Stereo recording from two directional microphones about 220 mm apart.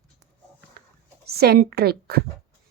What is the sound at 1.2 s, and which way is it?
Speech, 45° right (ahead or behind).